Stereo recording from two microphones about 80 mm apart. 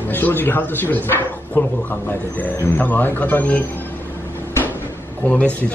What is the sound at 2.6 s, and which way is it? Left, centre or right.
Speech, left.